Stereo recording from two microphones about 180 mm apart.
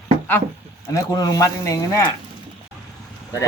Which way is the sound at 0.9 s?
20° left (ahead or behind).